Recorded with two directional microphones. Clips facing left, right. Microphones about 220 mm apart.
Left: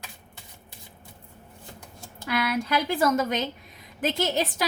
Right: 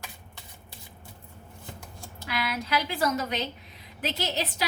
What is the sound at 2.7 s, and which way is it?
A woman's voice, 50° left (ahead or behind).